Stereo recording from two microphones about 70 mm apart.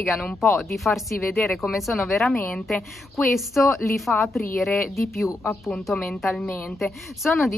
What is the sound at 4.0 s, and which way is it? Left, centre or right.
Speech, centre.